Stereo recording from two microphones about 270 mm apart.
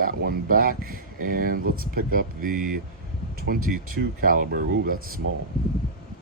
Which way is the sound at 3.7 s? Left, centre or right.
Right.